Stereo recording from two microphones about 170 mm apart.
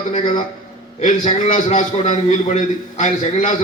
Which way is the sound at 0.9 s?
50° left (ahead or behind).